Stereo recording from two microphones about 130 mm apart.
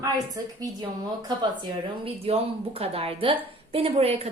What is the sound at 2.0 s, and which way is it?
A woman's voice, 50° right (ahead or behind).